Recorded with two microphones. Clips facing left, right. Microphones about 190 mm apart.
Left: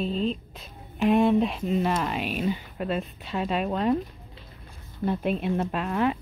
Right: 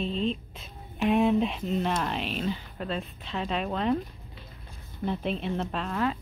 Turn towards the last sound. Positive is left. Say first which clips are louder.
# left 4 dB
turn(degrees=15)  # may be behind; listen again after turning